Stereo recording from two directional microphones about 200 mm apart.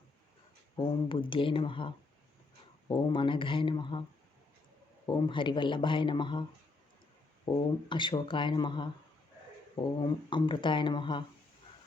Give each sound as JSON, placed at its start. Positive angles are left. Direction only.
{"t": 0.8, "sound": "a man's voice", "side_deg": 25}
{"t": 2.9, "sound": "a man's voice", "side_deg": 25}
{"t": 5.0, "sound": "a man's voice", "side_deg": 25}
{"t": 7.5, "sound": "a man's voice", "side_deg": 25}
{"t": 10.0, "sound": "a man's voice", "side_deg": 25}